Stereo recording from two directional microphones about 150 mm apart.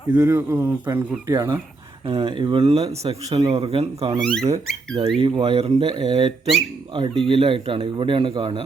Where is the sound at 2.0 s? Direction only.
35° right (ahead or behind).